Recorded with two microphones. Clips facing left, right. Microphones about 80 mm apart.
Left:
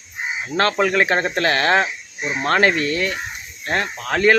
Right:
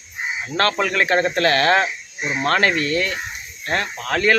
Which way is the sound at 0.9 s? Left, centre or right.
Left.